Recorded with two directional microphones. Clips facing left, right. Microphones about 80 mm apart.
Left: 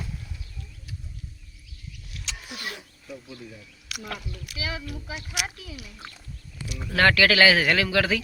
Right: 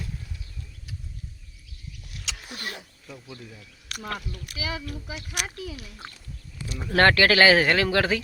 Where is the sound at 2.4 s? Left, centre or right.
Right.